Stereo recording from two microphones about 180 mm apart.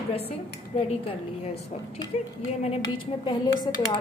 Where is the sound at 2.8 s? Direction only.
25° left (ahead or behind).